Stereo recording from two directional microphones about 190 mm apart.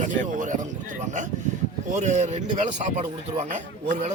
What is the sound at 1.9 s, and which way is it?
Speech, 40° right (ahead or behind).